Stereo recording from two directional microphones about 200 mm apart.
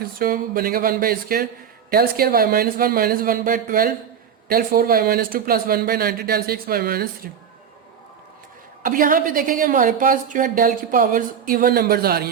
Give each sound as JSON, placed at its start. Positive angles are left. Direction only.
{"t": 0.0, "sound": "a woman's voice", "side_deg": -45}
{"t": 8.8, "sound": "a woman's voice", "side_deg": -45}